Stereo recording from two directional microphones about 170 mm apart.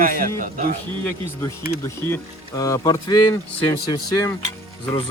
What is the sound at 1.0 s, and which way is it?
Speech, 15° left (ahead or behind).